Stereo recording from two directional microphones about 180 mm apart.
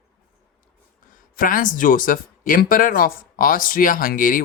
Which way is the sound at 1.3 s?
50° left (ahead or behind).